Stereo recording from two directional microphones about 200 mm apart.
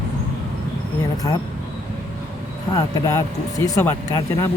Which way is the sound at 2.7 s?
15° left (ahead or behind).